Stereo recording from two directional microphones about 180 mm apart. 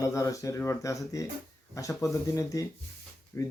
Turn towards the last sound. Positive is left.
turn(degrees=15)  # may be behind; listen again after turning